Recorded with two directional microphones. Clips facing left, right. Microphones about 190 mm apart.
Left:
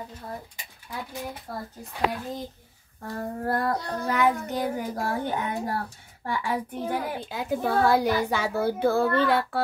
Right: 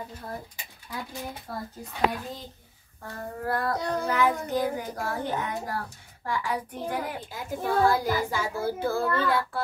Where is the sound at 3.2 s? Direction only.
40° left (ahead or behind).